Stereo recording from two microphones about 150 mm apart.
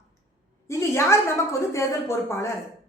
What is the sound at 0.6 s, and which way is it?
A woman's voice, 20° left (ahead or behind).